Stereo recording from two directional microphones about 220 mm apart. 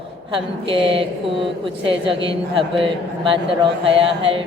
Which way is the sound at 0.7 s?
25° right (ahead or behind).